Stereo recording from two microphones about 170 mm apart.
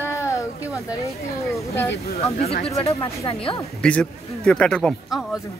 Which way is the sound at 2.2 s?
35° left (ahead or behind).